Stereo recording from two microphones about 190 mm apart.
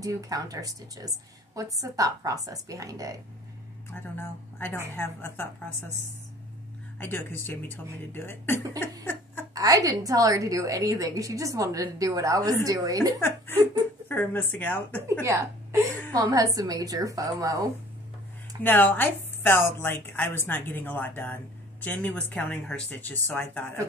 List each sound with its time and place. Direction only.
0.0 s a woman's voice: 20° right (ahead or behind)
3.9 s a woman's voice: 10° left (ahead or behind)
7.0 s a woman's voice: 10° left (ahead or behind)
9.5 s a woman's voice: 20° right (ahead or behind)
14.0 s a woman's voice: 10° left (ahead or behind)
15.0 s a woman's voice: 15° right (ahead or behind)
18.6 s a woman's voice: 10° left (ahead or behind)